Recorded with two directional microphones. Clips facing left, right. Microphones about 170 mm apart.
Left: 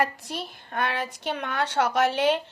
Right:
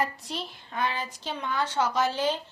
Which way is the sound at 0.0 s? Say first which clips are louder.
Left 3 dB; 50° left (ahead or behind).